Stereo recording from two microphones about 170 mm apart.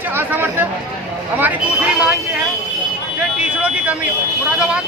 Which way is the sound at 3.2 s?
5° right (ahead or behind).